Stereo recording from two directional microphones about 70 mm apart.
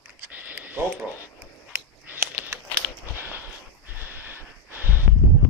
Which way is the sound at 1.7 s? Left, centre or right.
Right.